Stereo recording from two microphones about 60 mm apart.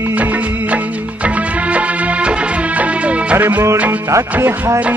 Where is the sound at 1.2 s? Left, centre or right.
Right.